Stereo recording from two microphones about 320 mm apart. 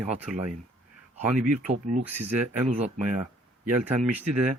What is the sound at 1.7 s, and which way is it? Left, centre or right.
Speech, right.